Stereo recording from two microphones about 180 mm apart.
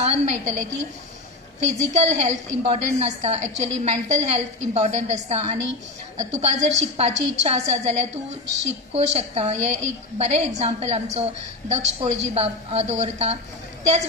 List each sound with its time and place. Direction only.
0.0 s a woman's voice: 40° right (ahead or behind)
2.0 s a woman's voice: 40° right (ahead or behind)